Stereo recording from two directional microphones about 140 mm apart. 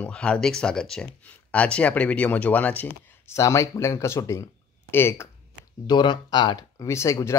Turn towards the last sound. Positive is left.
turn(degrees=20)  # may be behind; listen again after turning